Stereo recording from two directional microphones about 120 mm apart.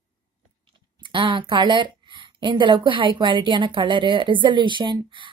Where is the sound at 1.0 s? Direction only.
45° right (ahead or behind).